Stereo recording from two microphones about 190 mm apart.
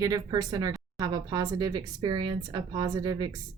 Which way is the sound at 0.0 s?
20° right (ahead or behind).